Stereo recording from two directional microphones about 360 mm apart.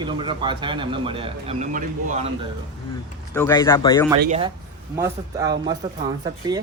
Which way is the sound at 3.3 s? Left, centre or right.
Centre.